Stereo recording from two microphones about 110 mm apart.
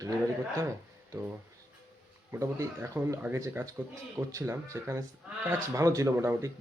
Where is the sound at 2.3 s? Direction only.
30° right (ahead or behind).